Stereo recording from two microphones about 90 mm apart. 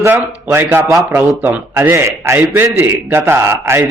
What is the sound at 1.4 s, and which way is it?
Speech, 20° right (ahead or behind).